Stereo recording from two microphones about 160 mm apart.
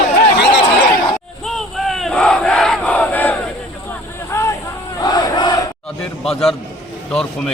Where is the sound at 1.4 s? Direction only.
Centre (ahead or behind).